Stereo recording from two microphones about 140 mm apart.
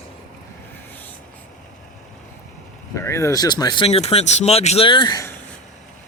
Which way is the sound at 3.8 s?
45° left (ahead or behind).